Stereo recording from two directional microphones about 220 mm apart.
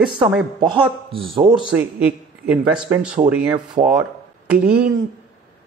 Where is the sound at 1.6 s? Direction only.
5° right (ahead or behind).